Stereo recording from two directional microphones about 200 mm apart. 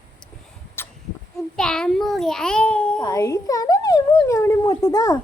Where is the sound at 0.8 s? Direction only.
10° left (ahead or behind).